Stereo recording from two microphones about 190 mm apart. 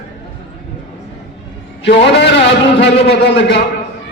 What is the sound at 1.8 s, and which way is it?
A man's voice, 65° left (ahead or behind).